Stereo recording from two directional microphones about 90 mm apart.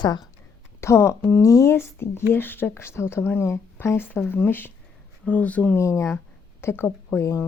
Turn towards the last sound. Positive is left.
turn(degrees=25)  # may be behind; listen again after turning